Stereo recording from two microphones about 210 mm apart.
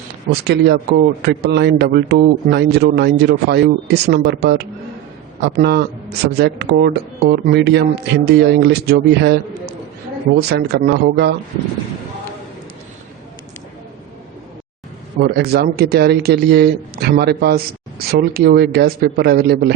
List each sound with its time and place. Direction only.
0.4 s speech: 50° right (ahead or behind)
15.2 s speech: 50° right (ahead or behind)